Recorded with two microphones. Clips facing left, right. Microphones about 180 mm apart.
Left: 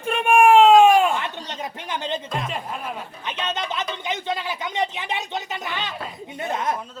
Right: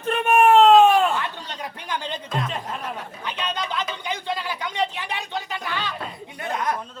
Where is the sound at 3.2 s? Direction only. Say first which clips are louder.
Left 1 dB; 20° left (ahead or behind).